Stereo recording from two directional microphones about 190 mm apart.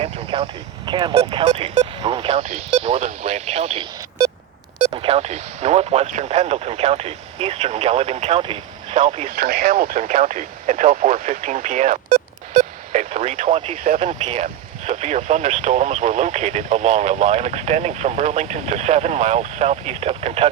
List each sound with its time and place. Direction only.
0.0 s vehicle: 30° right (ahead or behind)
0.9 s speech: 25° right (ahead or behind)
9.3 s speech: 50° right (ahead or behind); by 20.5 s 30° right (ahead or behind)